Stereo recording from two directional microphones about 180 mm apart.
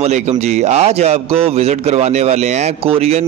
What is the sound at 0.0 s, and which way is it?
Speech, 40° right (ahead or behind).